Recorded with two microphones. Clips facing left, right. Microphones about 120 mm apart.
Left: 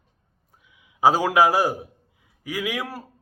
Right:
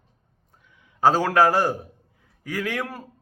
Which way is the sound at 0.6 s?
10° left (ahead or behind).